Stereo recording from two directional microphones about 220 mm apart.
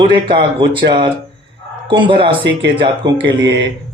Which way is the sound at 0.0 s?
20° right (ahead or behind).